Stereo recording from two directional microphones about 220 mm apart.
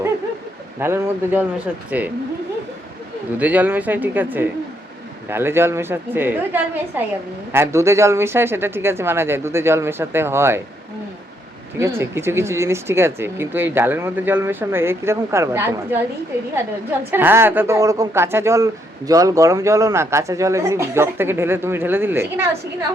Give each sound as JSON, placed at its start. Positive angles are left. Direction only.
{"t": 0.8, "sound": "speech", "side_deg": -10}
{"t": 3.3, "sound": "speech", "side_deg": -5}
{"t": 11.8, "sound": "speech", "side_deg": -10}
{"t": 17.1, "sound": "speech", "side_deg": -10}